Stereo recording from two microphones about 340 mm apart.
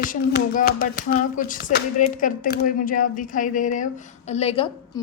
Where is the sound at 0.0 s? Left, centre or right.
Left.